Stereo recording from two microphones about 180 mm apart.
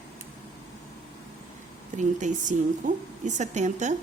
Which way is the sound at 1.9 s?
45° right (ahead or behind).